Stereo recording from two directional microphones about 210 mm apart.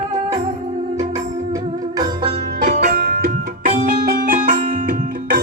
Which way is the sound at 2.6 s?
40° right (ahead or behind).